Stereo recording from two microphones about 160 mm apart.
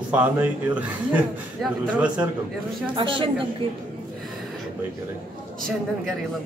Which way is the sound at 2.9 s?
30° right (ahead or behind).